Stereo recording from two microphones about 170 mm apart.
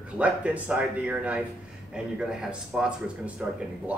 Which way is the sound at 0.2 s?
5° right (ahead or behind).